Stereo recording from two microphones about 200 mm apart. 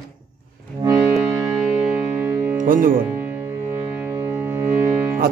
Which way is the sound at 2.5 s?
45° right (ahead or behind).